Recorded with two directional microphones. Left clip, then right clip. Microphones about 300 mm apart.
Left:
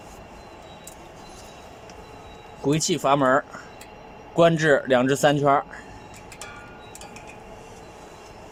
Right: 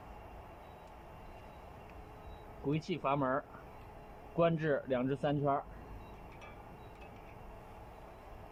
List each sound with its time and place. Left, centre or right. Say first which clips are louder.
2.6 s speech: left 14 dB; left